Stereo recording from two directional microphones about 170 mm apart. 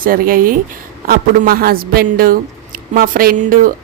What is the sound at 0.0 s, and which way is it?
Speech, 55° right (ahead or behind).